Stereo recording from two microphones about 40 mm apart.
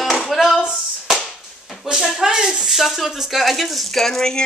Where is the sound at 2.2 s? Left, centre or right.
Centre.